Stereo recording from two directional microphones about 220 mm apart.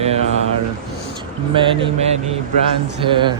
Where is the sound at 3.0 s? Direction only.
20° right (ahead or behind).